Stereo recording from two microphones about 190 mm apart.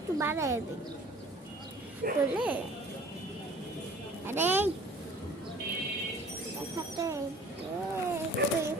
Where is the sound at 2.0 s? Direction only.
50° right (ahead or behind).